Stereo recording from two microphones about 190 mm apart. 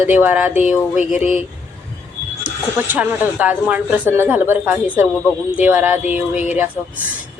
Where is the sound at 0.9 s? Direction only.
40° left (ahead or behind).